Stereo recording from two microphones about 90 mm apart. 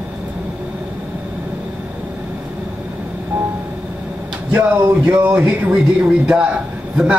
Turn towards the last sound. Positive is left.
turn(degrees=-15)  # may be behind; listen again after turning